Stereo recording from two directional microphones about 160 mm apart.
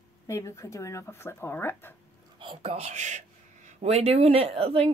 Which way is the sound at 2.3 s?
35° right (ahead or behind).